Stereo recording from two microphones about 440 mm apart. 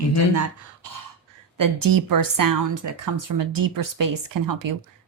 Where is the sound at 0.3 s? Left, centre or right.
Right.